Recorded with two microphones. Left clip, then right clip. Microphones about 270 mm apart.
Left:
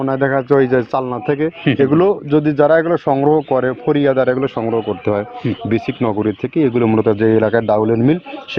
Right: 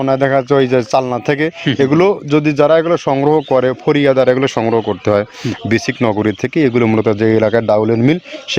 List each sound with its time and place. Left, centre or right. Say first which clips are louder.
0.0 s speech: right 3 dB; right